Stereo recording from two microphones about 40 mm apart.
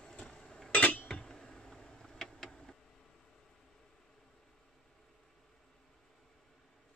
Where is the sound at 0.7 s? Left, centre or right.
Left.